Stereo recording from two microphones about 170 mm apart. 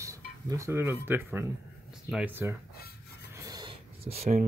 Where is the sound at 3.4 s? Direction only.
25° right (ahead or behind).